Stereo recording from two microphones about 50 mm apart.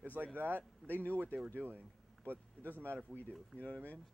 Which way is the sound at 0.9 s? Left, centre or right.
Left.